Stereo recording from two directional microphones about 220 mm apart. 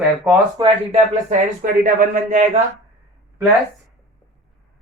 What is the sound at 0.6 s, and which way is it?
Speech, 20° right (ahead or behind).